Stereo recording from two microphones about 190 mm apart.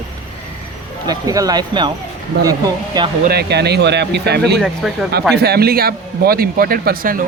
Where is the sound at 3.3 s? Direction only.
60° right (ahead or behind).